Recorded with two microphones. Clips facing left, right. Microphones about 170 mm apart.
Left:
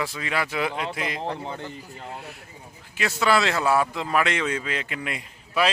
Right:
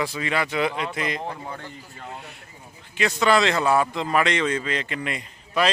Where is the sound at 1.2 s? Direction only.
25° left (ahead or behind).